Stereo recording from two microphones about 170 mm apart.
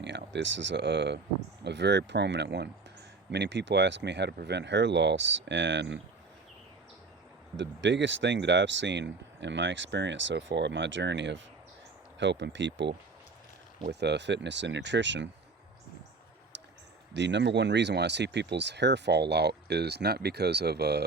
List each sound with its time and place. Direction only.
0.0 s speech: 90° right
7.5 s speech: 90° right
16.5 s a sound: 85° right
17.2 s speech: 90° right; by 21.0 s 75° right (ahead or behind)